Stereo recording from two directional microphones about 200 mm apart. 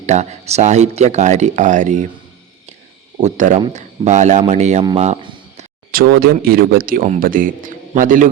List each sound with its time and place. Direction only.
0.0 s speech: 35° right (ahead or behind)
3.2 s speech: 35° right (ahead or behind)
4.9 s a sound: 30° right (ahead or behind)
5.9 s speech: 50° right (ahead or behind)